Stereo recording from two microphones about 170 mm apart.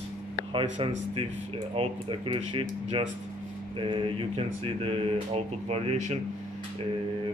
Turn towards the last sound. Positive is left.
turn(degrees=-40)  # may be behind; listen again after turning